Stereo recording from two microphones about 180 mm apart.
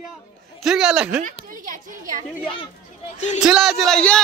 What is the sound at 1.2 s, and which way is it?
A woman's voice, 45° right (ahead or behind).